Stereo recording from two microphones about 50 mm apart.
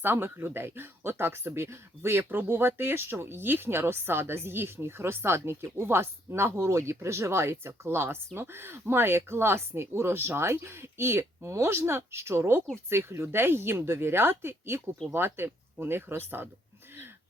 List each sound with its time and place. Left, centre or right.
0.0 s speech: right